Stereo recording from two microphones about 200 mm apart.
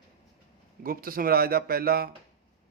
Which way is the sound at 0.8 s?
45° right (ahead or behind).